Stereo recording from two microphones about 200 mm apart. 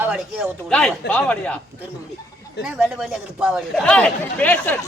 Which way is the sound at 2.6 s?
5° right (ahead or behind).